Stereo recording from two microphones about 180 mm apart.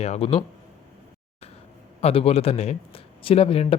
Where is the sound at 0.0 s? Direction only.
35° left (ahead or behind).